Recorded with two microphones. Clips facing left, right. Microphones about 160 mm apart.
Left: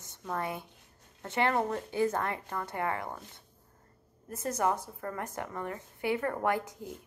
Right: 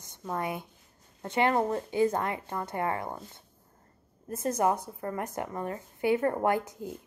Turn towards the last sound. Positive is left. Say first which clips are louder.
# right 3 dB
turn(degrees=-20)  # may be behind; listen again after turning